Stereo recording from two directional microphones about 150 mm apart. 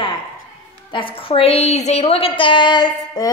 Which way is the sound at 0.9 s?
35° left (ahead or behind).